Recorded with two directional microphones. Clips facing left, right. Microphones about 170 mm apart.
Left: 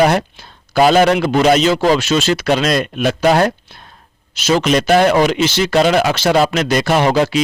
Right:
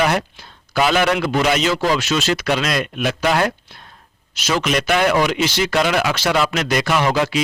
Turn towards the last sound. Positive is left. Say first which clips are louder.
# left 4 dB
turn(degrees=30)  # may be behind; listen again after turning